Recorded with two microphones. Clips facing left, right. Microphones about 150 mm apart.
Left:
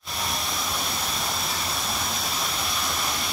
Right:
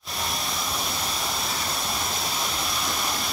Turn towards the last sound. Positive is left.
turn(degrees=0)  # may be behind; listen again after turning